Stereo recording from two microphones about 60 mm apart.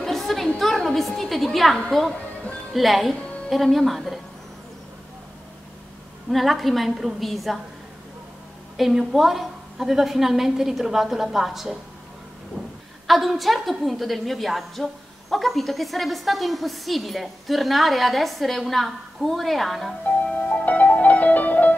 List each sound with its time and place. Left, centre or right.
0.0 s a sound: centre
0.6 s music: centre
1.9 s a woman's voice: centre
6.3 s a woman's voice: centre
8.7 s a woman's voice: centre
13.0 s a woman's voice: centre
20.1 s music: left